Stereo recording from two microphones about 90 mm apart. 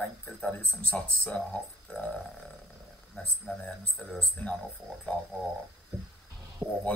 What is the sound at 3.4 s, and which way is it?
Speech, 10° left (ahead or behind).